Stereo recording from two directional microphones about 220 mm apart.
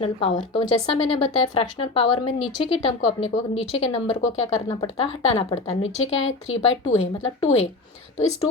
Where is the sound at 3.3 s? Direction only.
25° left (ahead or behind).